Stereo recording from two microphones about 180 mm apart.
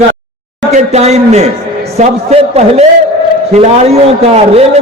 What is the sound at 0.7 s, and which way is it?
A man's voice, 40° right (ahead or behind).